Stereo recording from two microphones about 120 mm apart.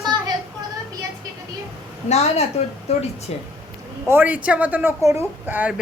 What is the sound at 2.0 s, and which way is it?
Speech, 65° left (ahead or behind).